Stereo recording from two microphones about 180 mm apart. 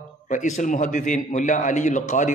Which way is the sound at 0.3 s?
45° left (ahead or behind).